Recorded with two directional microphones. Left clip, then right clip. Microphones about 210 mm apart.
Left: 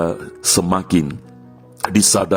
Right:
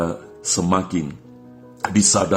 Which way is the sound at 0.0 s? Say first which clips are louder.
Left 5 dB; 40° left (ahead or behind).